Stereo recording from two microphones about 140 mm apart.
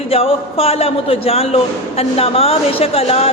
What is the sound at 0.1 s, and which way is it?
A man's voice, 45° left (ahead or behind).